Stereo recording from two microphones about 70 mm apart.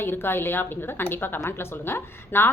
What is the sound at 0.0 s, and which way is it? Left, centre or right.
A woman's voice, left.